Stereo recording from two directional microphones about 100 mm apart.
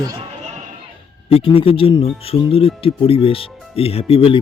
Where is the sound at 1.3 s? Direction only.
70° left (ahead or behind).